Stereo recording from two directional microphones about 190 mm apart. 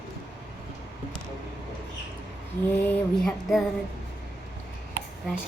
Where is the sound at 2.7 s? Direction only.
10° left (ahead or behind).